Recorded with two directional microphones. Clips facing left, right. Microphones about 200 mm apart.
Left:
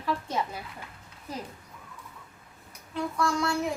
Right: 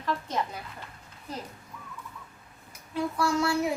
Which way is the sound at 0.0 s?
5° left (ahead or behind).